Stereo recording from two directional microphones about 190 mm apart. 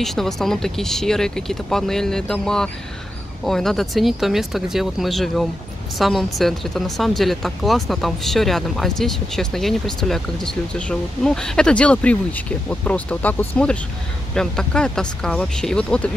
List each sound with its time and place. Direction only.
0.0 s speech: centre (ahead or behind)